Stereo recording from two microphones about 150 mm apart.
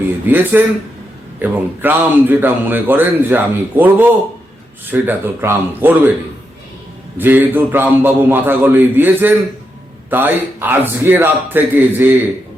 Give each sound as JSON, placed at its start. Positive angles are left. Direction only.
{"t": 0.3, "sound": "speech", "side_deg": -10}
{"t": 7.2, "sound": "speech", "side_deg": -10}